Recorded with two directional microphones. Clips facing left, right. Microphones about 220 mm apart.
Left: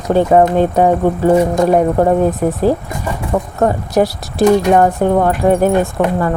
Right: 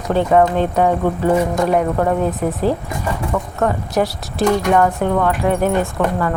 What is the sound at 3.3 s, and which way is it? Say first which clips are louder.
Speech: left 6 dB; 35° left (ahead or behind).